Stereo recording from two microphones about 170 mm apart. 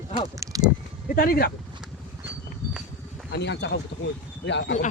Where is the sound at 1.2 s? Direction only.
60° left (ahead or behind).